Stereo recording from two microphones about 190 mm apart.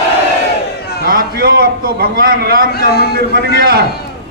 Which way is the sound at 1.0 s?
50° right (ahead or behind).